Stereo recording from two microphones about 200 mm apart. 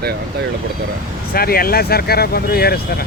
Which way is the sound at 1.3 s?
50° left (ahead or behind).